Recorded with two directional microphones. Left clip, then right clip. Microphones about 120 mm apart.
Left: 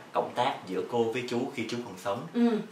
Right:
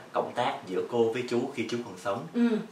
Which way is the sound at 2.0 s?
Centre (ahead or behind).